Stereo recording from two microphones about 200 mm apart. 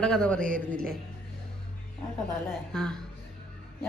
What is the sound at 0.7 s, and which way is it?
Speech, 5° left (ahead or behind).